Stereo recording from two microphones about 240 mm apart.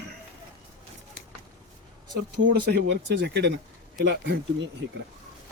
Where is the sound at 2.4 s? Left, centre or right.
Right.